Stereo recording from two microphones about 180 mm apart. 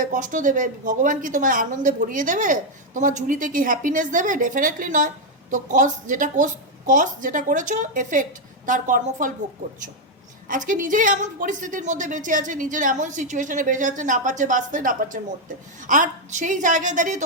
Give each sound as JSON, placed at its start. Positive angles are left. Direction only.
{"t": 0.0, "sound": "a woman's voice", "side_deg": -45}
{"t": 10.5, "sound": "a woman's voice", "side_deg": -45}